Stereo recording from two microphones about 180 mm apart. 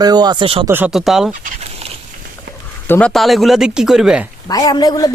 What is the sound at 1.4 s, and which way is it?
Dog, 35° right (ahead or behind).